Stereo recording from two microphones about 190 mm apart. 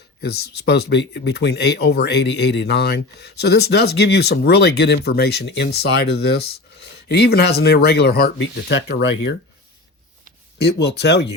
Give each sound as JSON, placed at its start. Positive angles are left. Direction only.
{"t": 0.2, "sound": "speech", "side_deg": 60}
{"t": 10.6, "sound": "speech", "side_deg": 60}